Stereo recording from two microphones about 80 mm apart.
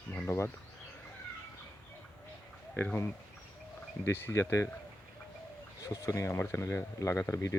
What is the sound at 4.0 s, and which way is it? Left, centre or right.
Speech, left.